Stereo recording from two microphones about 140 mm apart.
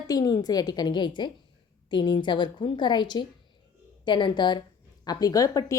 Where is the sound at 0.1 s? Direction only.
25° left (ahead or behind).